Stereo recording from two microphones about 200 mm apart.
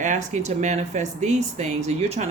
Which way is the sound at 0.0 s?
35° right (ahead or behind).